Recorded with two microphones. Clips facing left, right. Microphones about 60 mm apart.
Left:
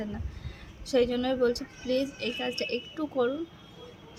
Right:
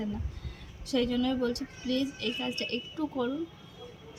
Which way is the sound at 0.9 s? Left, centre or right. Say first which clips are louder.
Left 3 dB; left.